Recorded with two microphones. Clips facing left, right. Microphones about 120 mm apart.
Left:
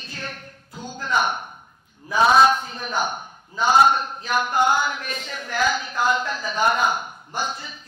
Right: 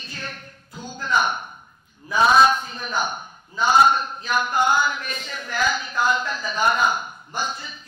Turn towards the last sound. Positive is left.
turn(degrees=60)  # may be behind; listen again after turning